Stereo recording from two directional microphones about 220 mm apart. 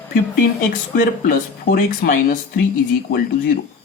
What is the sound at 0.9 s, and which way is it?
Speech, 40° left (ahead or behind).